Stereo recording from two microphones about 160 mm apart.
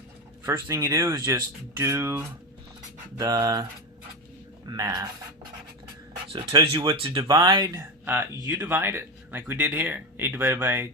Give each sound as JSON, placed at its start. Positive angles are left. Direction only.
{"t": 0.4, "sound": "speech", "side_deg": -20}
{"t": 4.7, "sound": "speech", "side_deg": -25}
{"t": 6.3, "sound": "speech", "side_deg": -35}
{"t": 8.0, "sound": "speech", "side_deg": -10}